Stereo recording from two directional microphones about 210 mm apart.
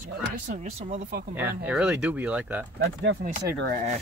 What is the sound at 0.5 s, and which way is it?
Speech, 35° right (ahead or behind).